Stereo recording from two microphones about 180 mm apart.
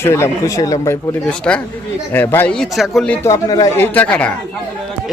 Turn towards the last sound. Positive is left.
turn(degrees=5)  # may be behind; listen again after turning